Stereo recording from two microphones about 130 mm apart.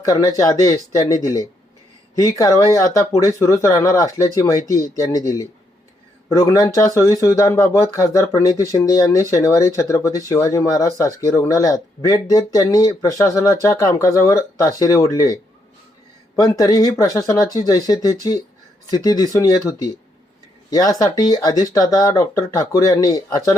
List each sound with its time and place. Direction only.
0.0 s speech: 25° left (ahead or behind)